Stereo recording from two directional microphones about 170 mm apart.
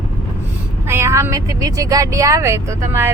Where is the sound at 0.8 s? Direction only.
15° right (ahead or behind).